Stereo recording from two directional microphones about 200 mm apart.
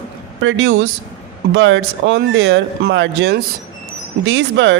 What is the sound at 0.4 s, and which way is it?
A man's voice, 65° right (ahead or behind).